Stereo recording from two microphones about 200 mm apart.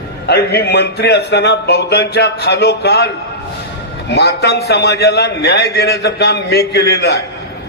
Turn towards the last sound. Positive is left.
turn(degrees=55)  # may be behind; listen again after turning